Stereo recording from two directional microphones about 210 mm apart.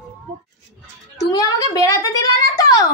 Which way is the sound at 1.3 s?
15° left (ahead or behind).